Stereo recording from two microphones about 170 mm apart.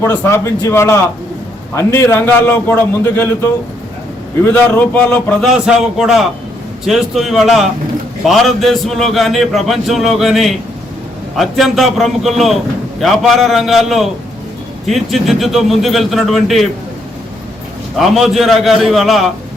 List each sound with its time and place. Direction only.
0.0 s a man's voice: 15° left (ahead or behind)
5.5 s a man's voice: 5° right (ahead or behind)
17.9 s a man's voice: centre (ahead or behind)